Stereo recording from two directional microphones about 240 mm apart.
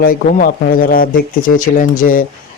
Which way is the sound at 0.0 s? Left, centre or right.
Left.